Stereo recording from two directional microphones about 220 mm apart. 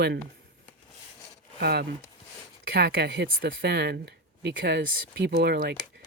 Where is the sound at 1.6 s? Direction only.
45° right (ahead or behind).